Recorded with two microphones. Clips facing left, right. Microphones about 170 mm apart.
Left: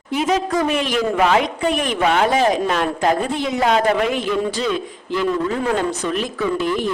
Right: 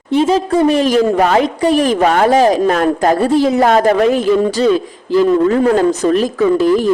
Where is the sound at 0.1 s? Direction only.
30° right (ahead or behind).